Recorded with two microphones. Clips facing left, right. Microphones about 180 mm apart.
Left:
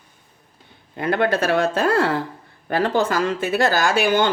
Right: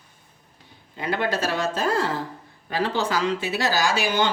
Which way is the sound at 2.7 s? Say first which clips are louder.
Left 5 dB; 50° left (ahead or behind).